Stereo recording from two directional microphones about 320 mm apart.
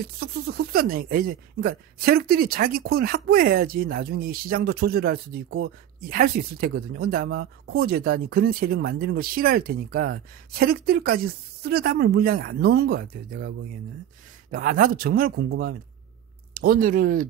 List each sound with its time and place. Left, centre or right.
0.0 s speech: right
14.5 s speech: right